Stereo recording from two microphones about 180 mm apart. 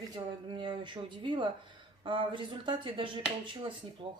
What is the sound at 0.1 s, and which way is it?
Speech, 25° right (ahead or behind).